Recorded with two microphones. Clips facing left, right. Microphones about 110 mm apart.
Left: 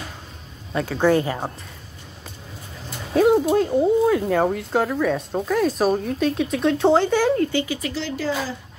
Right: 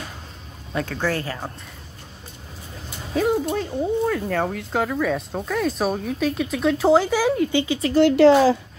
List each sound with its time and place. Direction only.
0.9 s speech: 20° left (ahead or behind)
3.2 s speech: 5° left (ahead or behind)
7.5 s speech: 20° right (ahead or behind)
7.9 s speech: 65° right (ahead or behind); by 8.5 s 85° right